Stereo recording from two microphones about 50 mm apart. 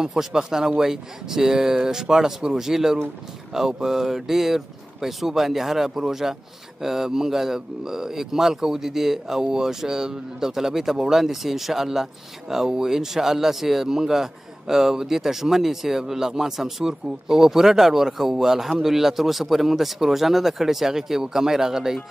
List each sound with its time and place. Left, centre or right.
0.0 s a man's voice: centre